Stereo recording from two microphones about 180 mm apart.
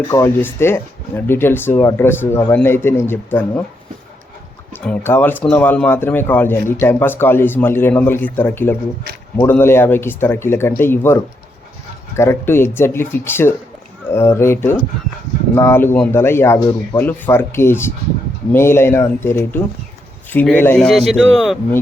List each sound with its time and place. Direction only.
0.1 s speech: 15° left (ahead or behind)
4.7 s a man's voice: 10° left (ahead or behind)